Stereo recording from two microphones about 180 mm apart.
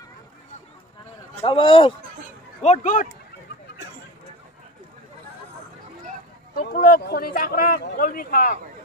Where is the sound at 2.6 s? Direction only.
40° left (ahead or behind).